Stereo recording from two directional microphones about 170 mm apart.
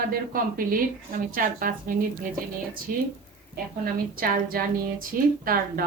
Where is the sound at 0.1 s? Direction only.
55° right (ahead or behind).